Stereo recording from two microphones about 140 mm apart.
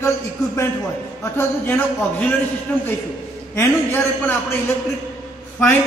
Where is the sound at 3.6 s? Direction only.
15° left (ahead or behind).